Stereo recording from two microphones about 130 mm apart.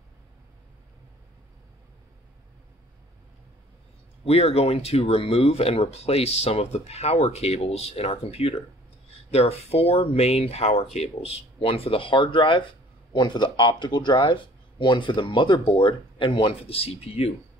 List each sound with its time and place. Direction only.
4.3 s speech: 50° left (ahead or behind)